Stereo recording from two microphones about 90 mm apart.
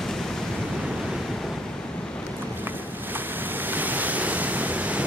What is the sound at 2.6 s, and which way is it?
Waves, 20° right (ahead or behind).